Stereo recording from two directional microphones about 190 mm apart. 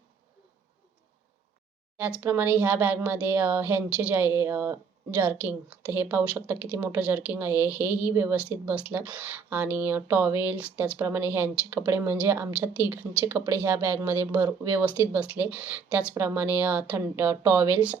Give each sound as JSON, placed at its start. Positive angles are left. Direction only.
{"t": 2.2, "sound": "a woman's voice", "side_deg": -10}